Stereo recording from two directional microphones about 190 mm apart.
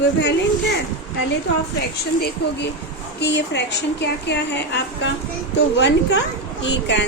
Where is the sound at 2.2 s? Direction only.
55° left (ahead or behind).